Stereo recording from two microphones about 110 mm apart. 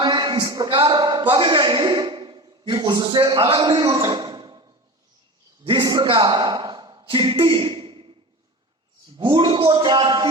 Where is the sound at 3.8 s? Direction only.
35° right (ahead or behind).